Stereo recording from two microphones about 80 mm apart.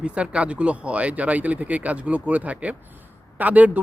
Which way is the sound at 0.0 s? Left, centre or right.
Centre.